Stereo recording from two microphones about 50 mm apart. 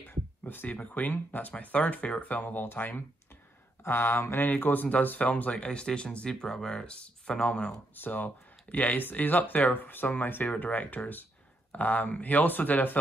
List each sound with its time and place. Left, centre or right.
0.1 s a sound: left
0.7 s speech: left
4.2 s mantra: left
4.5 s speech: left
5.5 s speech: centre
7.9 s speech: left